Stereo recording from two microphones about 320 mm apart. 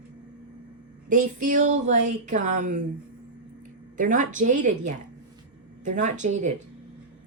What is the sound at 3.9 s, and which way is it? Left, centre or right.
A woman's voice, right.